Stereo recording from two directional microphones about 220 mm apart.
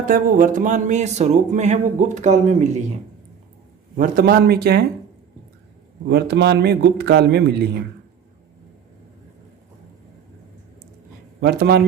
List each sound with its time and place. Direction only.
0.0 s a sound: 40° right (ahead or behind)
3.9 s a man's voice: 40° right (ahead or behind)
6.1 s a man's voice: 50° right (ahead or behind)
11.3 s speech: 45° right (ahead or behind)